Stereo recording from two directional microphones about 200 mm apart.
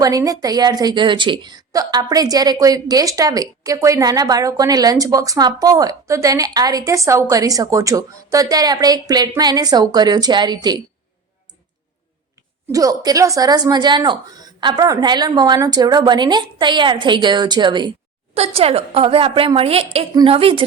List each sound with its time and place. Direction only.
0.0 s a woman's voice: 20° right (ahead or behind)
12.7 s a woman's voice: 20° right (ahead or behind)